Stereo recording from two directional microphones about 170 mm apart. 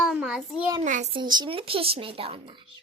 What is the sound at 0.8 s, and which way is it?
Speech, 45° right (ahead or behind).